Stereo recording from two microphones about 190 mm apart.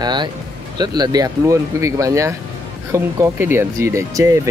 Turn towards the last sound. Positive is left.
turn(degrees=-15)  # may be behind; listen again after turning